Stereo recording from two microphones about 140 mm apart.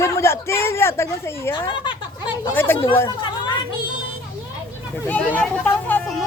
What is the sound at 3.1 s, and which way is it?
Chatter, 30° left (ahead or behind).